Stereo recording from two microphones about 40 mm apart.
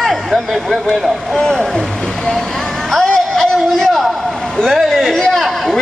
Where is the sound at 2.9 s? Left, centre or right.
Centre.